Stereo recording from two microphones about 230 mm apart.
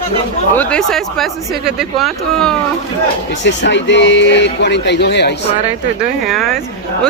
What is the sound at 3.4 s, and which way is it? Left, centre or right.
Speech, left.